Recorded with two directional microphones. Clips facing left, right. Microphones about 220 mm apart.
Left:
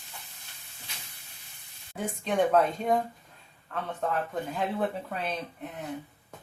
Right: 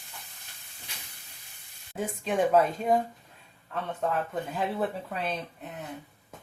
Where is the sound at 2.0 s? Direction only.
Centre (ahead or behind).